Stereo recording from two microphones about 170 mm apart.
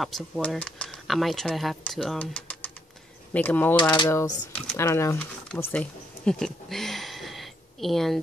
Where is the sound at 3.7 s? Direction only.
25° left (ahead or behind).